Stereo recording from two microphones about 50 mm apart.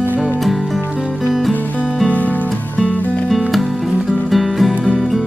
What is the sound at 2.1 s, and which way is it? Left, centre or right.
Music, left.